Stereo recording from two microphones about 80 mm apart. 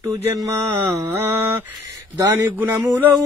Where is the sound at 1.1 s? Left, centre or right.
Right.